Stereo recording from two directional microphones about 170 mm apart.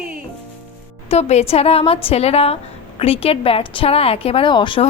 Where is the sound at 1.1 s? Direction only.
40° left (ahead or behind).